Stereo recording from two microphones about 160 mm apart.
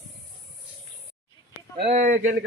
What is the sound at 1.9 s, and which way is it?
Speech, 50° right (ahead or behind).